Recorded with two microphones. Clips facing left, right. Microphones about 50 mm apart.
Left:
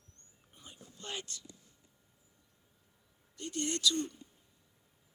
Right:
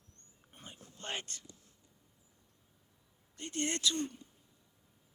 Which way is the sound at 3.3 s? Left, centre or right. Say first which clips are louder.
Even; right.